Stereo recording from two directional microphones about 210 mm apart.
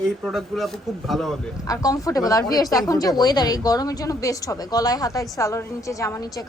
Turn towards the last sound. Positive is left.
turn(degrees=15)  # may be behind; listen again after turning